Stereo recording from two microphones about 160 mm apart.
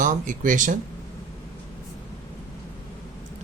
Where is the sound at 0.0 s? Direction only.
55° right (ahead or behind).